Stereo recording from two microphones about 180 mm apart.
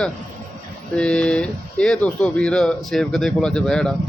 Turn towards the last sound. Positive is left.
turn(degrees=5)  # may be behind; listen again after turning